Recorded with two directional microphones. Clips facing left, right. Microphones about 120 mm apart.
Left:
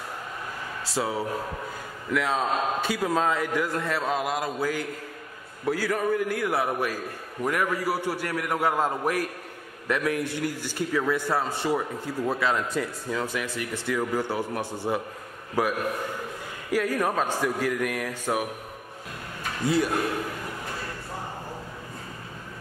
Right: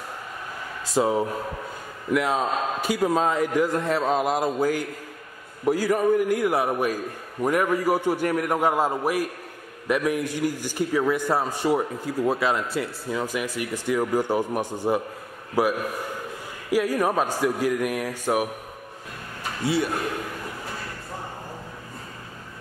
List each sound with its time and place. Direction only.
0.8 s a man's voice: 20° right (ahead or behind)
4.1 s mantra: 30° right (ahead or behind)
5.7 s a man's voice: 15° right (ahead or behind)
16.7 s a man's voice: 10° right (ahead or behind)
19.6 s a man's voice: centre (ahead or behind)